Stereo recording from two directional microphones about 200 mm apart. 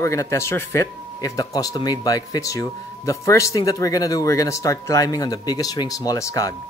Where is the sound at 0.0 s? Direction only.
15° left (ahead or behind).